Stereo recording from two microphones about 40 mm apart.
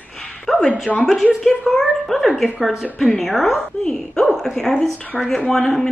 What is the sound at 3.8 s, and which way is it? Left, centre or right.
A woman's voice, centre.